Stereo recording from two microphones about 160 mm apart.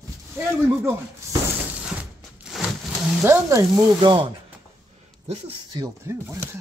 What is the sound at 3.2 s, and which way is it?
Speech, 15° right (ahead or behind).